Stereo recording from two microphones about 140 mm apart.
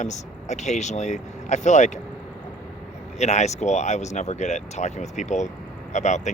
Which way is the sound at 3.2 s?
55° left (ahead or behind).